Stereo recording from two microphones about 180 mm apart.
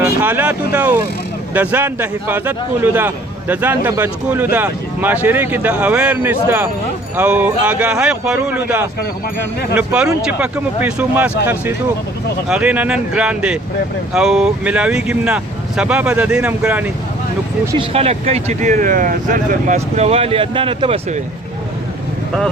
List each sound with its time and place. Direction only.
0.0 s speech: 10° right (ahead or behind)
17.7 s speech: 35° right (ahead or behind)